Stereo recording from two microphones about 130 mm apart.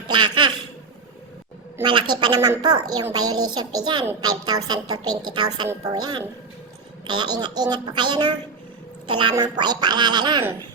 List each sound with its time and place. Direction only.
0.1 s a sound: 35° right (ahead or behind)
1.8 s a woman's voice: 35° right (ahead or behind)
9.3 s a woman's voice: 30° right (ahead or behind)